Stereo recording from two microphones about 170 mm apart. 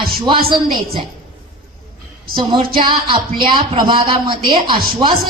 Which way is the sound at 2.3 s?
30° right (ahead or behind).